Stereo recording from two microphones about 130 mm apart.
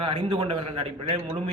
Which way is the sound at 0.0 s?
40° right (ahead or behind).